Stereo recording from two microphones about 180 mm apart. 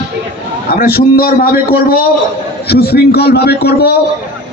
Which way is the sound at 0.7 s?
55° left (ahead or behind).